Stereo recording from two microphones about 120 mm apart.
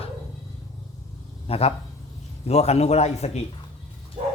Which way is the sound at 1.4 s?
55° left (ahead or behind).